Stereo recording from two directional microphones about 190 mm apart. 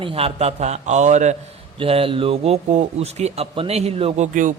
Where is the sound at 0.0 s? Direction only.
30° right (ahead or behind).